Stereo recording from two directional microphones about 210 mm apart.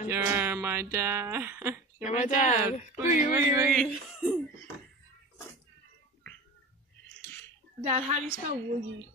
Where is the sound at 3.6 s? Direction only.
5° left (ahead or behind).